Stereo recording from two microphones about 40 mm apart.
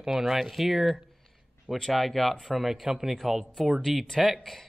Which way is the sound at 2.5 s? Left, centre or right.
Centre.